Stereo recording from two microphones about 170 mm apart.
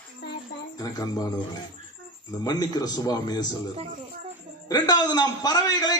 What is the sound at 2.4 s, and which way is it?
A man's voice, 20° left (ahead or behind).